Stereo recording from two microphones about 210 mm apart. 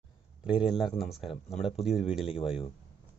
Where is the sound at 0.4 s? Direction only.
5° right (ahead or behind).